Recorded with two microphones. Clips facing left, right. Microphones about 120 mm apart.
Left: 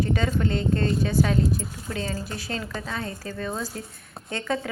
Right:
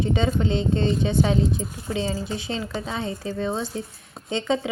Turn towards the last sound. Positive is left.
turn(degrees=-25)  # may be behind; listen again after turning